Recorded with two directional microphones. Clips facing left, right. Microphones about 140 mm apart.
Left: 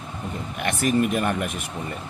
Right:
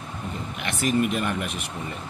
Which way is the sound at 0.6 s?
45° left (ahead or behind).